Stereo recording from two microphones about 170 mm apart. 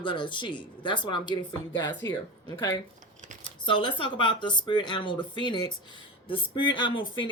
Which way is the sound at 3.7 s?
30° left (ahead or behind).